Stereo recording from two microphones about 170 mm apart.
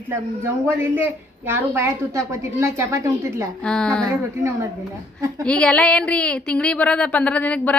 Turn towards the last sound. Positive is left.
turn(degrees=10)  # may be behind; listen again after turning